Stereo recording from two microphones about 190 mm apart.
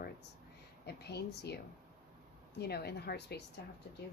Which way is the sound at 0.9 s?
60° left (ahead or behind).